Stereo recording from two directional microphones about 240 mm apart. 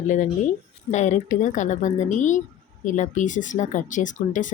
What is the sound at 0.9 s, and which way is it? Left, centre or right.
Speech, left.